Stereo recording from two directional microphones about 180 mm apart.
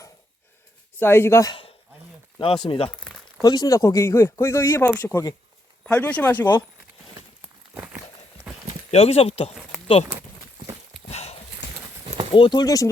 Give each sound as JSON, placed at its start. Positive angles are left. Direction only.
{"t": 0.9, "sound": "speech", "side_deg": 10}
{"t": 2.4, "sound": "speech", "side_deg": 30}
{"t": 2.9, "sound": "crumpling", "side_deg": 5}
{"t": 3.4, "sound": "speech", "side_deg": 20}
{"t": 8.9, "sound": "speech", "side_deg": 35}
{"t": 11.1, "sound": "a sound", "side_deg": 35}
{"t": 12.3, "sound": "speech", "side_deg": 25}